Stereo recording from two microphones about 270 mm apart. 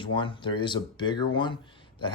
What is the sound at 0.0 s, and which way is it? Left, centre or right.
Speech, centre.